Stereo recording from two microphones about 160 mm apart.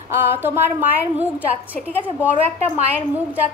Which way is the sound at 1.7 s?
10° left (ahead or behind).